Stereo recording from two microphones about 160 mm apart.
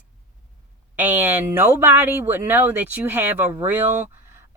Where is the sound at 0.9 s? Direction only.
10° right (ahead or behind).